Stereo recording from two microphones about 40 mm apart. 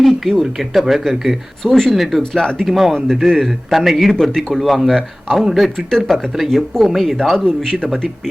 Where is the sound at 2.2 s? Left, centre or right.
Centre.